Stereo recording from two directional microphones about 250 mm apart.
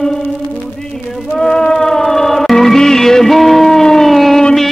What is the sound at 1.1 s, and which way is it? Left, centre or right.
Music, centre.